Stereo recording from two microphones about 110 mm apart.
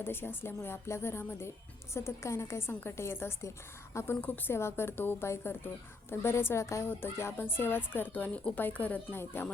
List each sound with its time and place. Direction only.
0.0 s a woman's voice: 20° left (ahead or behind)